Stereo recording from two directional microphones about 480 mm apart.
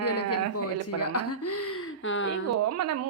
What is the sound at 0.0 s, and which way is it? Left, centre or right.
Speech, left.